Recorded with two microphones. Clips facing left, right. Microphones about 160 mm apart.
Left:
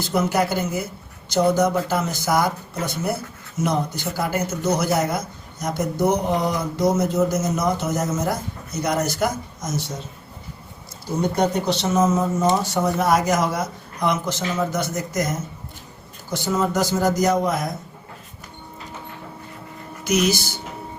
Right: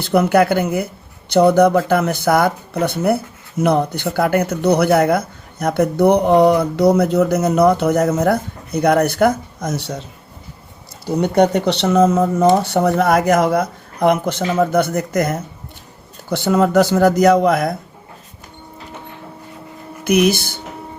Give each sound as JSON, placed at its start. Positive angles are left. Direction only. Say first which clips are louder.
{"t": 0.0, "sound": "speech", "louder": "right 7 dB", "side_deg": -65}
{"t": 11.0, "sound": "speech", "louder": "right 6 dB", "side_deg": -70}
{"t": 20.1, "sound": "speech", "louder": "right 6 dB", "side_deg": -60}